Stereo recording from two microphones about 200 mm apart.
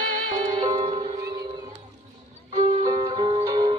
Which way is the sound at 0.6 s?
30° right (ahead or behind).